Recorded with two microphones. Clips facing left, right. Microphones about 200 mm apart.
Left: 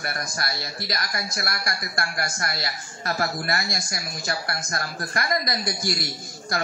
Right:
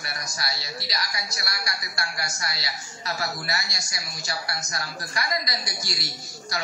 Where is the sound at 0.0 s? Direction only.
55° left (ahead or behind).